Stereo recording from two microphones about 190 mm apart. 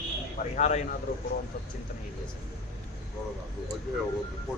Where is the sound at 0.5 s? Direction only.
35° left (ahead or behind).